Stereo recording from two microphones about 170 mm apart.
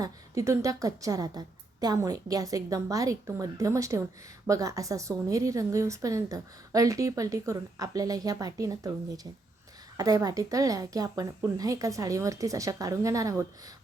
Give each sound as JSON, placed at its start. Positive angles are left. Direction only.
{"t": 0.0, "sound": "a woman's voice", "side_deg": -20}